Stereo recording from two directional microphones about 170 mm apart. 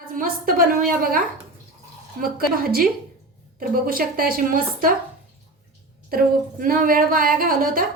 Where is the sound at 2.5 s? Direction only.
60° right (ahead or behind).